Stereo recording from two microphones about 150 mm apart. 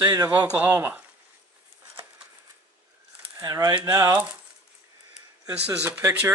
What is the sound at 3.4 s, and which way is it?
Speech, 25° right (ahead or behind).